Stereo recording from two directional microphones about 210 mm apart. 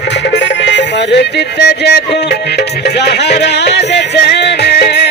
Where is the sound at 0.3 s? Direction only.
55° left (ahead or behind).